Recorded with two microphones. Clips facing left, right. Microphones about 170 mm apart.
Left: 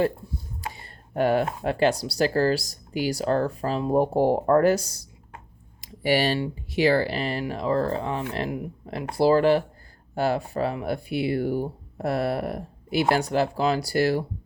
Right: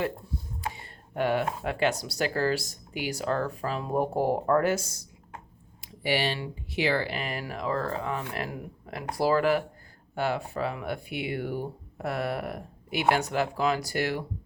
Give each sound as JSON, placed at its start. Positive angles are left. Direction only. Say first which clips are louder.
{"t": 0.8, "sound": "speech", "louder": "left 6 dB", "side_deg": 40}
{"t": 5.8, "sound": "a sound", "louder": "left 5 dB", "side_deg": 40}
{"t": 6.7, "sound": "speech", "louder": "left 6 dB", "side_deg": 40}